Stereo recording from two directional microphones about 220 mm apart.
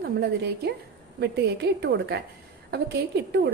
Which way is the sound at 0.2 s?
50° right (ahead or behind).